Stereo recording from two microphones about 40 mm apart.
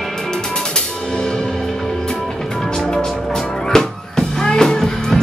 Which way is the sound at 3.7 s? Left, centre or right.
Centre.